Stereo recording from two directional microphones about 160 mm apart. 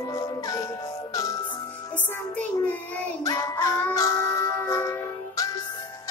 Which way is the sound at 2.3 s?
10° left (ahead or behind).